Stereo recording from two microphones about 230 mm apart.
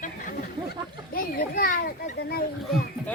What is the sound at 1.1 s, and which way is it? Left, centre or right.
Children playing, left.